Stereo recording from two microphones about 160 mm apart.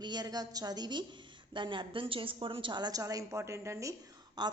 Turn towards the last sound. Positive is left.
turn(degrees=-25)  # may be behind; listen again after turning